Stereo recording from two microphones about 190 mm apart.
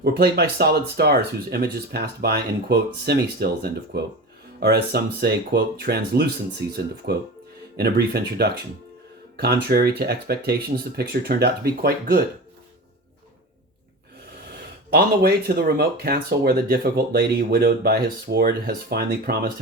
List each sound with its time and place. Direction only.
0.0 s speech: 55° right (ahead or behind)
6.6 s speech: 15° right (ahead or behind)
7.0 s speech: 55° right (ahead or behind)
14.9 s speech: 50° right (ahead or behind)